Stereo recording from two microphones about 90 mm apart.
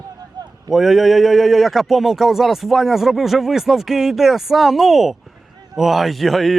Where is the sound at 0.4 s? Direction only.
50° right (ahead or behind).